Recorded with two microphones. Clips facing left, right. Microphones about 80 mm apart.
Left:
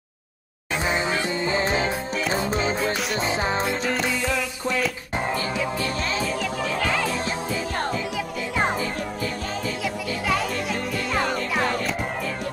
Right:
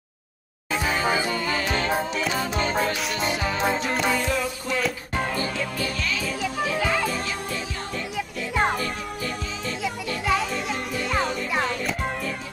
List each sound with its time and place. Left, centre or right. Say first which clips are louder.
0.7 s music: right 1 dB; left
2.8 s music: even; centre
3.2 s music: left 2 dB; left
5.1 s music: left 2 dB; left
6.2 s music: left 1 dB; centre
9.2 s music: left 2 dB; centre